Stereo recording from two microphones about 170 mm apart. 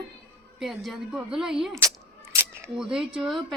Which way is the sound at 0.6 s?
Centre (ahead or behind).